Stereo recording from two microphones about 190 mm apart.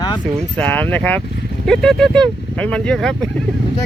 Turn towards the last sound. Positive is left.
turn(degrees=0)  # may be behind; listen again after turning